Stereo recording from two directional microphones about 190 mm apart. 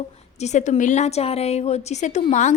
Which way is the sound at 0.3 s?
35° left (ahead or behind).